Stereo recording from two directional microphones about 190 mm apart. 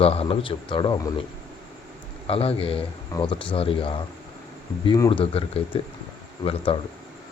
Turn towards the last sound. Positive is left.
turn(degrees=30)  # may be behind; listen again after turning